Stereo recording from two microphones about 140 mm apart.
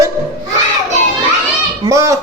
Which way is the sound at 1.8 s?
20° right (ahead or behind).